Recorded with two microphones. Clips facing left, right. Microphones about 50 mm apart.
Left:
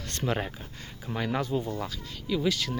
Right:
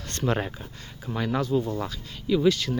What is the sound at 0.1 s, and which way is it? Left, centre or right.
Speech, centre.